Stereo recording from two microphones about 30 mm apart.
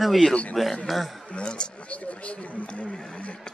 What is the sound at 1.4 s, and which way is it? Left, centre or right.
Speech, left.